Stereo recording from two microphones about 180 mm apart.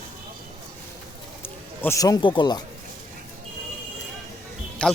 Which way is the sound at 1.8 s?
15° left (ahead or behind).